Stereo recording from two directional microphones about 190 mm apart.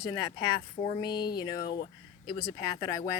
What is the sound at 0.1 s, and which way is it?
Speech, 20° left (ahead or behind).